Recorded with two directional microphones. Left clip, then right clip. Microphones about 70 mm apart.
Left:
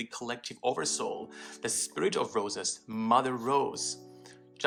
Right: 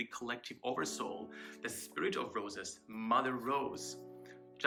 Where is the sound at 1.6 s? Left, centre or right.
Left.